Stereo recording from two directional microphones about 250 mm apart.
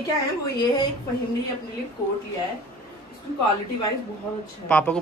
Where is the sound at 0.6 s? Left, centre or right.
Centre.